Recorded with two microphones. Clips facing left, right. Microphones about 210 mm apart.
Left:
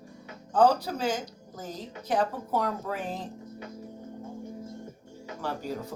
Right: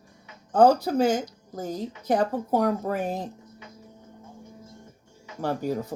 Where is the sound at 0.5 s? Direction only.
45° right (ahead or behind).